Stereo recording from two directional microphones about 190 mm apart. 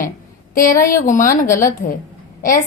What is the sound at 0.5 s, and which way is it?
A woman's voice, 45° left (ahead or behind).